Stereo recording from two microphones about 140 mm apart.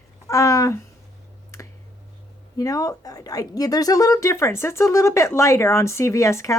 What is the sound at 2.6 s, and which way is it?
A woman's voice, 25° left (ahead or behind).